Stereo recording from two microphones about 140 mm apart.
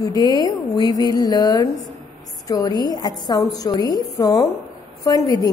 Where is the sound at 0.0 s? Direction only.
30° left (ahead or behind).